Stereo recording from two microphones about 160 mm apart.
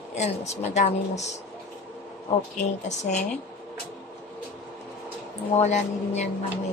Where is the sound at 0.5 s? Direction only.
45° left (ahead or behind).